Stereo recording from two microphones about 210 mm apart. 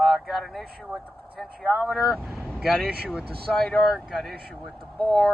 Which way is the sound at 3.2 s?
45° right (ahead or behind).